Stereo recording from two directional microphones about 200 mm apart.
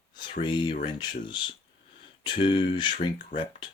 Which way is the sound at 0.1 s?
25° left (ahead or behind).